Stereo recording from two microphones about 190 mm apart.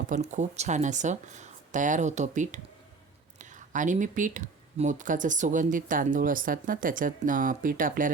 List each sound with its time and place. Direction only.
0.1 s speech: 40° right (ahead or behind)
3.7 s speech: 40° right (ahead or behind)